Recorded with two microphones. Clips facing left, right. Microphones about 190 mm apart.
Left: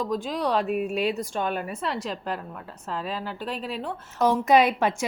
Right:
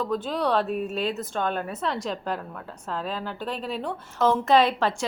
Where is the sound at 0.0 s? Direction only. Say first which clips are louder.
Right 1 dB; 10° left (ahead or behind).